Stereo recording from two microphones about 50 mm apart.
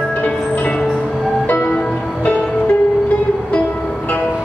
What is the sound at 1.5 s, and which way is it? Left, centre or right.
Music, left.